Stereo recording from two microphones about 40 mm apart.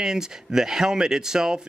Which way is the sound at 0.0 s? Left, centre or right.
Centre.